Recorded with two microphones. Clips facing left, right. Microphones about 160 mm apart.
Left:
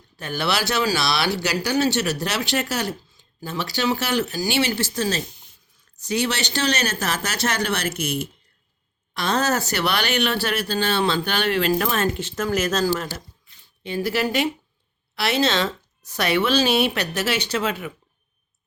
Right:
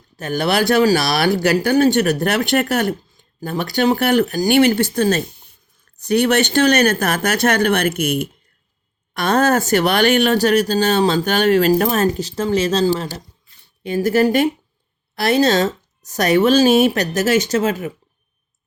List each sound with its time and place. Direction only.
0.2 s speech: 45° right (ahead or behind); by 13.1 s 30° right (ahead or behind)
13.8 s speech: 45° right (ahead or behind)